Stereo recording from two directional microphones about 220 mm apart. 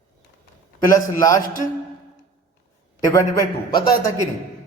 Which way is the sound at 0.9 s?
15° left (ahead or behind).